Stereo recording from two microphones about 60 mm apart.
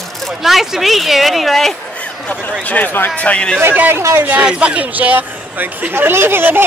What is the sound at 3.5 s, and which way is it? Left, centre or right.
Speech, right.